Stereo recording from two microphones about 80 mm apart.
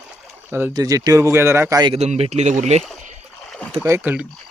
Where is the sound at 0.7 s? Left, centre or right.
Right.